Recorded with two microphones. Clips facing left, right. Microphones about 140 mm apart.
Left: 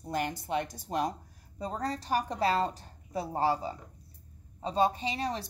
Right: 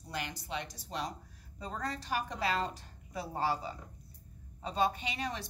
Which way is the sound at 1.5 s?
40° left (ahead or behind).